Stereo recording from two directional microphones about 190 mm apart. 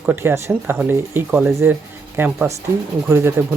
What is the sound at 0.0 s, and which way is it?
Speech, 10° right (ahead or behind).